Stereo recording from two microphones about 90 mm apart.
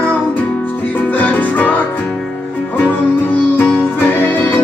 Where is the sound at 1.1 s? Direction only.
20° left (ahead or behind).